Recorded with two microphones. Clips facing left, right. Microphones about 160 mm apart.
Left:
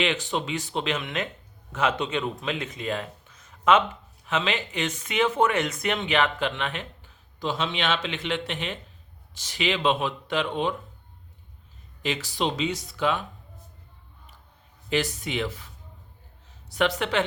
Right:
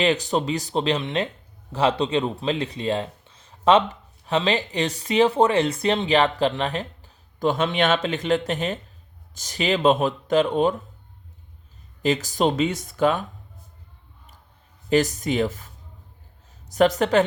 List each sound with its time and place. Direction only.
0.0 s speech: 40° right (ahead or behind)
12.0 s speech: 45° right (ahead or behind)
14.8 s speech: 40° right (ahead or behind)